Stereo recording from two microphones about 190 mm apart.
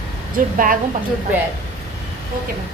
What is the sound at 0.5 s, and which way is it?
Speech, 45° right (ahead or behind).